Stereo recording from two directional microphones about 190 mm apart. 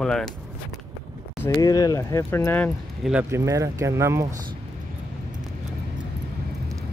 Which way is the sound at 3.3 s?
15° right (ahead or behind).